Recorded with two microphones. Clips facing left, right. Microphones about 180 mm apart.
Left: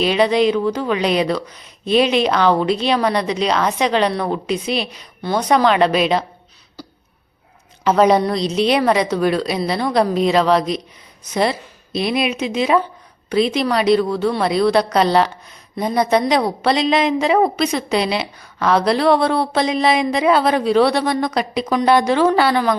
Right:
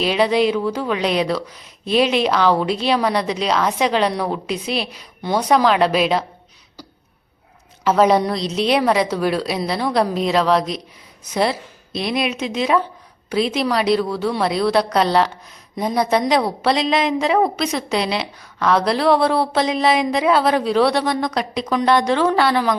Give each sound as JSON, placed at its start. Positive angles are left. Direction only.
{"t": 0.0, "sound": "a woman's voice", "side_deg": -5}
{"t": 7.9, "sound": "a woman's voice", "side_deg": 0}
{"t": 11.9, "sound": "a woman's voice", "side_deg": 0}